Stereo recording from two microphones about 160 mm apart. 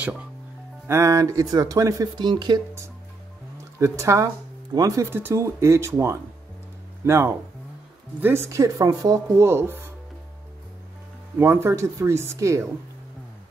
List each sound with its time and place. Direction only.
0.0 s speech: 10° right (ahead or behind); by 2.6 s 30° right (ahead or behind)
3.8 s speech: 15° right (ahead or behind)
11.3 s speech: 15° right (ahead or behind)